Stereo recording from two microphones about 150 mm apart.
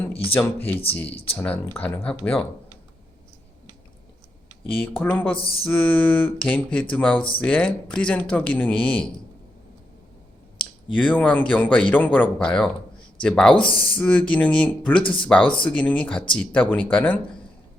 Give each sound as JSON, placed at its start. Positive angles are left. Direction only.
{"t": 0.3, "sound": "speech", "side_deg": 10}
{"t": 1.0, "sound": "speech", "side_deg": 40}
{"t": 1.4, "sound": "speech", "side_deg": 10}
{"t": 4.7, "sound": "speech", "side_deg": 10}
{"t": 5.4, "sound": "speech", "side_deg": 35}
{"t": 5.6, "sound": "speech", "side_deg": 10}
{"t": 10.9, "sound": "a man's voice", "side_deg": 10}
{"t": 13.6, "sound": "speech", "side_deg": 35}
{"t": 14.0, "sound": "speech", "side_deg": 10}
{"t": 15.0, "sound": "speech", "side_deg": 35}
{"t": 15.3, "sound": "speech", "side_deg": 10}